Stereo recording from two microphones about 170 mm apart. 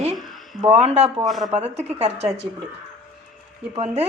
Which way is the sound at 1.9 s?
40° right (ahead or behind).